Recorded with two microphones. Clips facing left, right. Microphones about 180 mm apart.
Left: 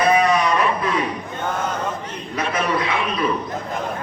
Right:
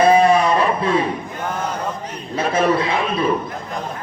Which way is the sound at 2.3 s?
30° right (ahead or behind).